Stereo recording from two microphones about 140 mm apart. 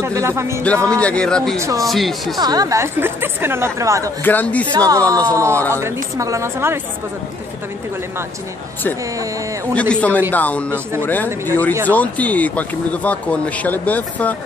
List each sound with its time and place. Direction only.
0.0 s a woman's voice: 20° right (ahead or behind)
0.8 s speech: 5° left (ahead or behind)
1.6 s a woman's voice: 25° right (ahead or behind)
1.9 s speech: centre (ahead or behind)
2.3 s a woman's voice: 30° right (ahead or behind)
4.2 s speech: 15° left (ahead or behind)
4.7 s a woman's voice: 25° right (ahead or behind)
9.8 s speech: 10° left (ahead or behind)
11.2 s a woman's voice: 20° right (ahead or behind)
11.9 s speech: 10° left (ahead or behind)